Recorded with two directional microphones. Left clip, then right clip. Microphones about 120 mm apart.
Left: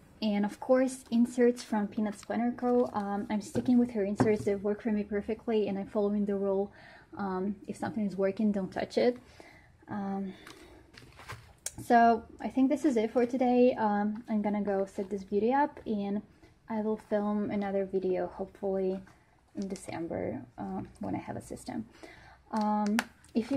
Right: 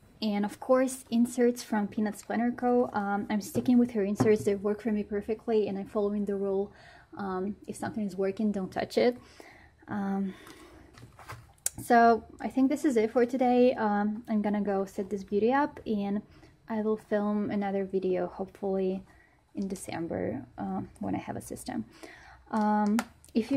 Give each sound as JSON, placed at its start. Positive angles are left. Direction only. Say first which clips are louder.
{"t": 0.2, "sound": "a woman's voice", "louder": "even", "side_deg": -5}
{"t": 1.7, "sound": "speech", "louder": "right 2 dB", "side_deg": -20}
{"t": 3.7, "sound": "speech", "louder": "right 1 dB", "side_deg": -35}
{"t": 4.7, "sound": "a woman's voice", "louder": "right 1 dB", "side_deg": -15}
{"t": 11.6, "sound": "speech", "louder": "right 2 dB", "side_deg": -15}